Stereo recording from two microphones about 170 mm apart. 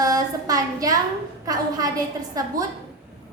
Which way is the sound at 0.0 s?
20° right (ahead or behind).